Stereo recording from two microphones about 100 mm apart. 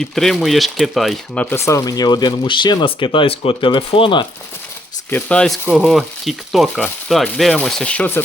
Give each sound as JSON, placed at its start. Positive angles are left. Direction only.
{"t": 0.0, "sound": "speech", "side_deg": 5}
{"t": 1.4, "sound": "speech", "side_deg": 25}
{"t": 2.8, "sound": "speech", "side_deg": 60}
{"t": 5.1, "sound": "speech", "side_deg": 10}
{"t": 5.7, "sound": "speech", "side_deg": 0}